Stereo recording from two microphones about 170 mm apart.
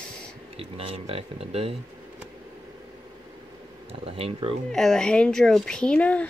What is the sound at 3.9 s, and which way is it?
Speech, 35° right (ahead or behind).